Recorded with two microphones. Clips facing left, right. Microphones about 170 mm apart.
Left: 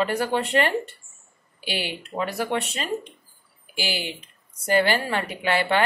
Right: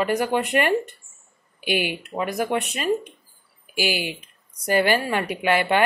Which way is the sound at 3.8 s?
15° right (ahead or behind).